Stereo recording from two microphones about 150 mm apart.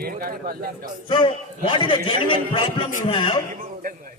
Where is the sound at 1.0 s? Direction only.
35° left (ahead or behind).